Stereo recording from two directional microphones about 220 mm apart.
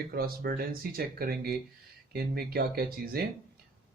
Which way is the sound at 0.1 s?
45° right (ahead or behind).